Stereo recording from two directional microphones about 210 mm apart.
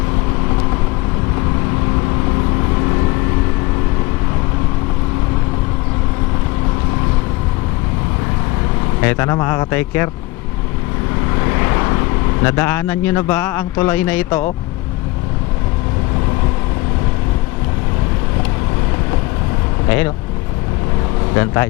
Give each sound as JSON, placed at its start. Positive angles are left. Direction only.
{"t": 9.0, "sound": "a man's voice", "side_deg": 15}
{"t": 11.4, "sound": "speech", "side_deg": 15}
{"t": 21.3, "sound": "a man's voice", "side_deg": 10}